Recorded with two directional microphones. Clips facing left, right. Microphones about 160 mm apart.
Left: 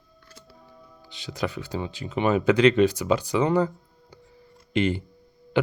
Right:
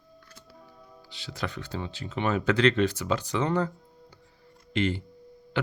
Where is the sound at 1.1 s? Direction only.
15° left (ahead or behind).